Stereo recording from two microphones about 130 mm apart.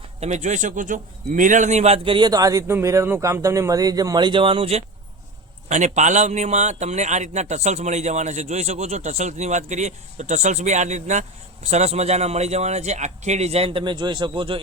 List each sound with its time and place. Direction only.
0.2 s a man's voice: 60° right (ahead or behind)
2.0 s speech: 35° right (ahead or behind)
5.6 s a man's voice: 60° right (ahead or behind); by 14.6 s 40° right (ahead or behind)